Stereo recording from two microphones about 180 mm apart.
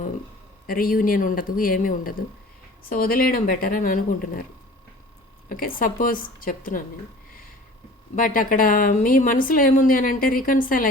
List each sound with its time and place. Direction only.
0.7 s speech: 50° left (ahead or behind)
5.5 s speech: 50° left (ahead or behind)
8.1 s speech: 50° left (ahead or behind)